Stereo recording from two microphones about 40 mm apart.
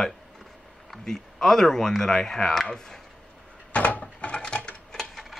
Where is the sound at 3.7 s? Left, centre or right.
Left.